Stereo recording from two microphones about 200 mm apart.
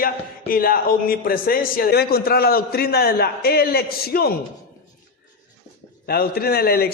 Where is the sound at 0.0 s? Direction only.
45° left (ahead or behind).